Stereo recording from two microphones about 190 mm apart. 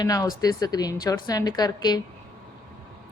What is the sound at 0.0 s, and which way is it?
A woman's voice, 20° left (ahead or behind).